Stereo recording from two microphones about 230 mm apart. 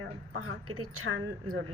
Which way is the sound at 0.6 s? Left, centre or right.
Right.